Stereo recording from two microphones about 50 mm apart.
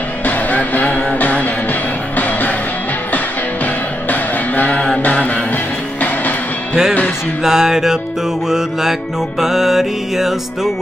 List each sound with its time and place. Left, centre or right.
0.5 s music: left
4.1 s music: left
6.7 s music: centre